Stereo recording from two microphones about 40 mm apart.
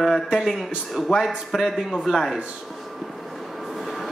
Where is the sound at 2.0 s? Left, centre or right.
Centre.